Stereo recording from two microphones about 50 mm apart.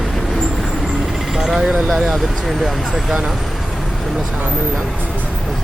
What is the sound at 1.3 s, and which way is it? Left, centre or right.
Speech, centre.